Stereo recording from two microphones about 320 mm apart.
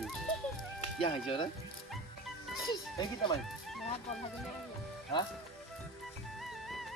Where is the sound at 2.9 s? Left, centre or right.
Centre.